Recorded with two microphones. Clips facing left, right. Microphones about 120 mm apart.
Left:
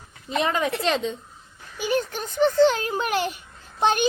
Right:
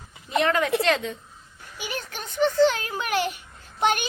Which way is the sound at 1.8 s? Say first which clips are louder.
Left 9 dB; 35° left (ahead or behind).